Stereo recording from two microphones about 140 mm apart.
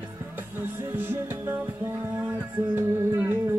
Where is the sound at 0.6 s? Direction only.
15° right (ahead or behind).